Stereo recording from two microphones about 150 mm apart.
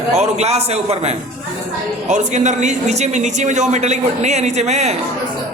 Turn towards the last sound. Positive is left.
turn(degrees=-50)  # may be behind; listen again after turning